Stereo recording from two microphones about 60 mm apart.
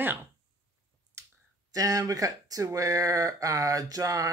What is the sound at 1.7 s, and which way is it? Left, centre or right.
Speech, right.